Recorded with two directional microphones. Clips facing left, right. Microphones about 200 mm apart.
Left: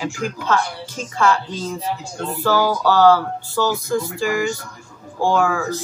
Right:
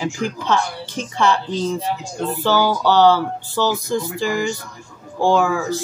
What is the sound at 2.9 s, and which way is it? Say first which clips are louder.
Speech: even; 20° right (ahead or behind).